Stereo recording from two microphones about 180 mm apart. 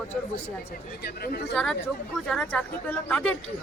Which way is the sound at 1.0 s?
60° left (ahead or behind).